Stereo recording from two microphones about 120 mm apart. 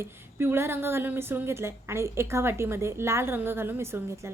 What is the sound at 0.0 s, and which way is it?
A woman's voice, 20° right (ahead or behind).